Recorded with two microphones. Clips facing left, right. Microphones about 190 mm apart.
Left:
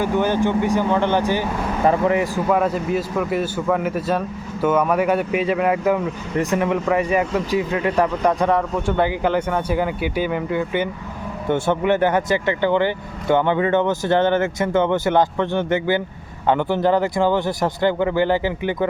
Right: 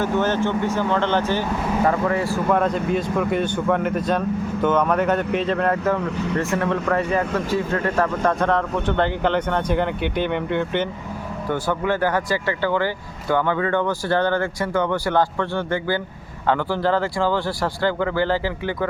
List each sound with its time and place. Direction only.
0.0 s speech: 10° left (ahead or behind)
2.5 s speech: 5° left (ahead or behind)
11.4 s speech: 25° left (ahead or behind)